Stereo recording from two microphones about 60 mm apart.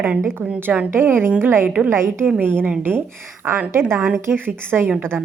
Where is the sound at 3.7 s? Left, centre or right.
Right.